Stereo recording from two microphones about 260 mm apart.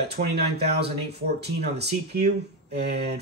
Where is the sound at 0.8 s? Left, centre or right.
Right.